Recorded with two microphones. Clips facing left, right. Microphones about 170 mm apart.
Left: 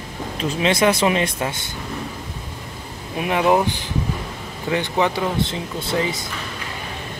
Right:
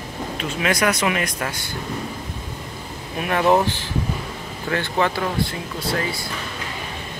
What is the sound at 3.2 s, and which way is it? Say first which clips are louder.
Speech: even; 15° left (ahead or behind).